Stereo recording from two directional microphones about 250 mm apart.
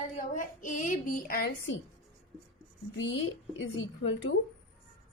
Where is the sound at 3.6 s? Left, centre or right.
Left.